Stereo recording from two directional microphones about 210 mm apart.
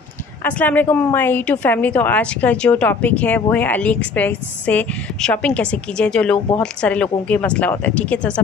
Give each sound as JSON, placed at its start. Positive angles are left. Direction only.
{"t": 0.4, "sound": "a woman's voice", "side_deg": 10}